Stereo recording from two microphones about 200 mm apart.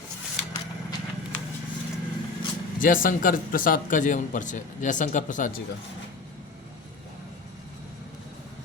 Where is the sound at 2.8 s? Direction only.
45° left (ahead or behind).